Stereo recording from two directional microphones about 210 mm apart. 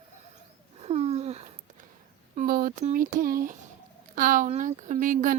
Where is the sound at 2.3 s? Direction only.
40° right (ahead or behind).